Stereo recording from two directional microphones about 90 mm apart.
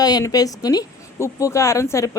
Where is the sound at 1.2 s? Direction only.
30° left (ahead or behind).